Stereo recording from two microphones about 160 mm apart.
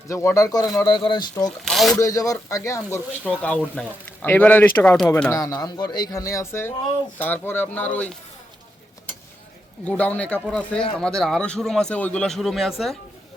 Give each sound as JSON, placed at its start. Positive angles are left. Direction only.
{"t": 0.1, "sound": "speech", "side_deg": 20}
{"t": 1.5, "sound": "speech", "side_deg": 0}
{"t": 2.0, "sound": "speech", "side_deg": 20}
{"t": 9.8, "sound": "speech", "side_deg": 10}